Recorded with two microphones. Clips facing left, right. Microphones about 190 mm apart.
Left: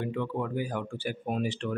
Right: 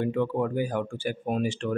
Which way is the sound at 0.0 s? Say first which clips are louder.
Right 6 dB; 45° right (ahead or behind).